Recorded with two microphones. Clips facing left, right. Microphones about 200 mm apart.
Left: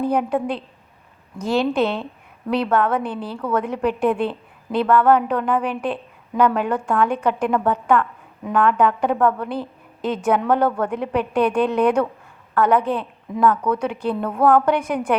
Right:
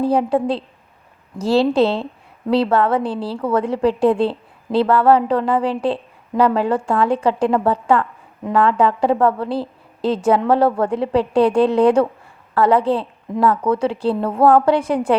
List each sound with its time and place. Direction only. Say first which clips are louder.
0.0 s a woman's voice: right 4 dB; 30° right (ahead or behind)